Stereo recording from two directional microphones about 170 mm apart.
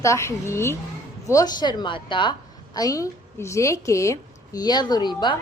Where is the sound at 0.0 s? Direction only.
15° left (ahead or behind).